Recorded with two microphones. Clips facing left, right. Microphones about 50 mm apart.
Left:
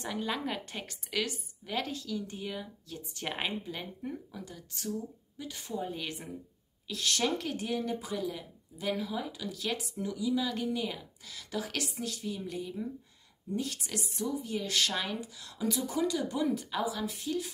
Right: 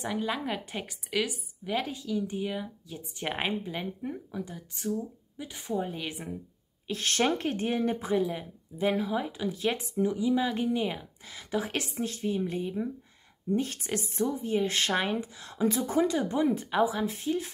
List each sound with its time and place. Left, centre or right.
0.0 s a woman's voice: centre
6.9 s speech: right